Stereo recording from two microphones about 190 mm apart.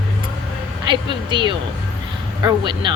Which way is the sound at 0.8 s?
25° right (ahead or behind).